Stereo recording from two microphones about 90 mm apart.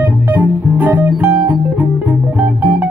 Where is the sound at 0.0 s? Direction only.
15° right (ahead or behind).